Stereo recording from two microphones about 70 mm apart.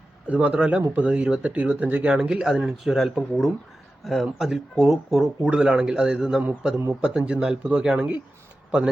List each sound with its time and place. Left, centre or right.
0.3 s speech: centre
2.9 s speech: centre
6.4 s speech: right
7.0 s speech: centre